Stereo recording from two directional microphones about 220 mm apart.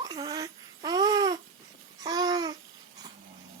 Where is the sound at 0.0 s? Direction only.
15° right (ahead or behind).